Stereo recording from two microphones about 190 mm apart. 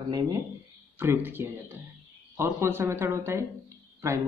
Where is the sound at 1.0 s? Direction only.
10° right (ahead or behind).